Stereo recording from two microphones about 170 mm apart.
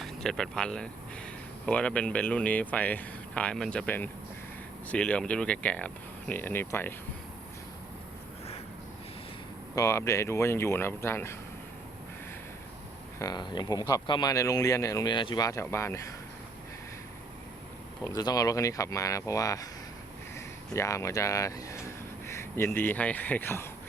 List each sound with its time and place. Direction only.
0.0 s speech: 5° left (ahead or behind)
9.7 s speech: 15° left (ahead or behind)
13.1 s speech: 25° left (ahead or behind)
18.0 s speech: 20° left (ahead or behind)
20.7 s speech: 20° left (ahead or behind)